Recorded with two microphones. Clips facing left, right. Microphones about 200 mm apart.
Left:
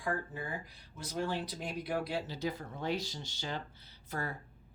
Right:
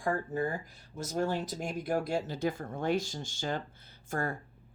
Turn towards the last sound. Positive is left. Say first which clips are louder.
# right 5 dB
turn(degrees=-50)  # may be behind; listen again after turning